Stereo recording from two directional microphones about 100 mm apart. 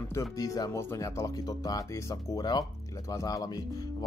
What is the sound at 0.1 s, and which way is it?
Speech, 30° left (ahead or behind).